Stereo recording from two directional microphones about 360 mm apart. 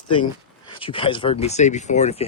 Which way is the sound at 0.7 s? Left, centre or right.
Centre.